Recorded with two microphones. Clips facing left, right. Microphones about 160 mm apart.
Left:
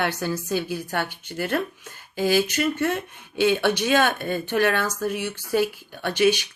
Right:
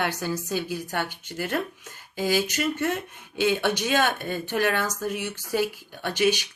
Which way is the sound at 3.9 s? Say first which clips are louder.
Left 3 dB; 15° right (ahead or behind).